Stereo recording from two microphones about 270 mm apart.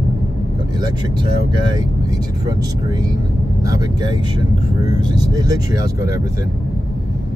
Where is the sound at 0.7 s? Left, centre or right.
Centre.